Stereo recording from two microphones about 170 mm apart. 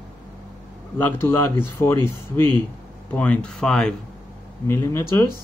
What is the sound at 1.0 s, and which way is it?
Speech, 15° left (ahead or behind).